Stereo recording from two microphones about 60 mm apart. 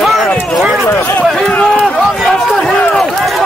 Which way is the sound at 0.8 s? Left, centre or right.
Left.